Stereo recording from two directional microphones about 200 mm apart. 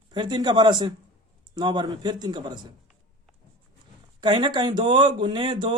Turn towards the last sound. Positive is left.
turn(degrees=-25)  # may be behind; listen again after turning